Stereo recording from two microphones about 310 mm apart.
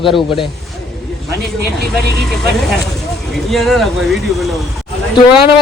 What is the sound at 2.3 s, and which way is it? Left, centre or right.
A man's voice, centre.